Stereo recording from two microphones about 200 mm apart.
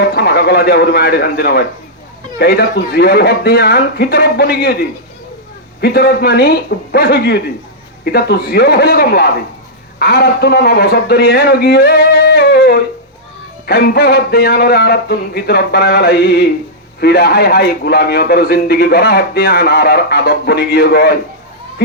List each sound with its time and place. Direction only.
0.1 s a man's voice: 50° left (ahead or behind)